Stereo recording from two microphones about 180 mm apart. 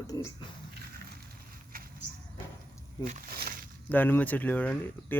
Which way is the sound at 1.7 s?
55° right (ahead or behind).